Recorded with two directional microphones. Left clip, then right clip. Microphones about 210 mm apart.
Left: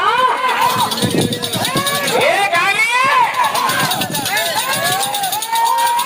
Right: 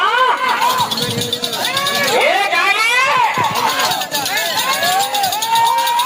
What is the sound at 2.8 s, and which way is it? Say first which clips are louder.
Run: left 1 dB; 15° left (ahead or behind).